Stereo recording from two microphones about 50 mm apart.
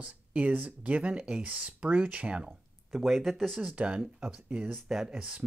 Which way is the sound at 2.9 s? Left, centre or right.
Centre.